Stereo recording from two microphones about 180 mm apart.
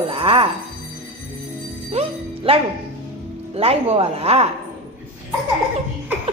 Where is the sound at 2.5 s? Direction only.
30° right (ahead or behind).